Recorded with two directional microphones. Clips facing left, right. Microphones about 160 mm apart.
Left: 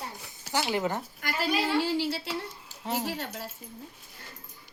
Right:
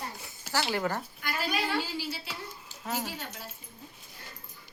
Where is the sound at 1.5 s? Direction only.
25° left (ahead or behind).